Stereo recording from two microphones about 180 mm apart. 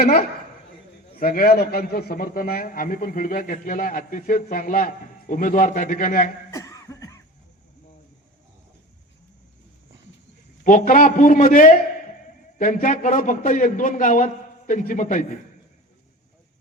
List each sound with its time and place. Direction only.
0.0 s a man's voice: 55° left (ahead or behind)
6.5 s cough: 20° left (ahead or behind)
10.6 s a man's voice: 50° left (ahead or behind)